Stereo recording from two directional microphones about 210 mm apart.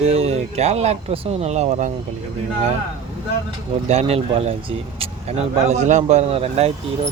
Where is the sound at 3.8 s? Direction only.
30° right (ahead or behind).